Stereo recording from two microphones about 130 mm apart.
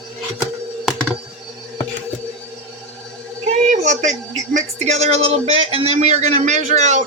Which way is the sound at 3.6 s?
65° right (ahead or behind).